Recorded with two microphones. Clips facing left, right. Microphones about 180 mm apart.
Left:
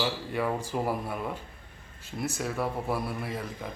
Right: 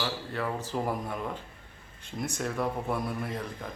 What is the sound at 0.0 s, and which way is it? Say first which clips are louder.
Speech: left 3 dB; 10° left (ahead or behind).